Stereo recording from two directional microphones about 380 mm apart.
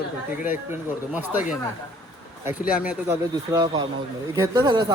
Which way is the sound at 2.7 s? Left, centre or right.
Centre.